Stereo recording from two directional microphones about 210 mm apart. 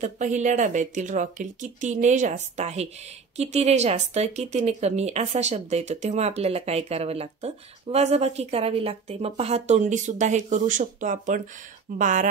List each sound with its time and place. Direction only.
0.0 s speech: 35° right (ahead or behind)